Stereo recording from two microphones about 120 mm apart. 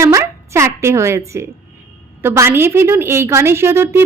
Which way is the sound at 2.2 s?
20° right (ahead or behind).